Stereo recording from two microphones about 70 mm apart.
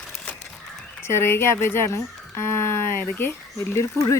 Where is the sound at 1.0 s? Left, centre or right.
Left.